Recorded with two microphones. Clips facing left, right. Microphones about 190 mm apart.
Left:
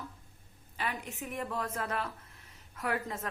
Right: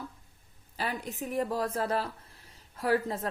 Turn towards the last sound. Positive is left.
turn(degrees=-35)  # may be behind; listen again after turning